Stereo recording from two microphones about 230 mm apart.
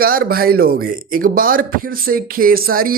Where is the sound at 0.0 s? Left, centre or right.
Right.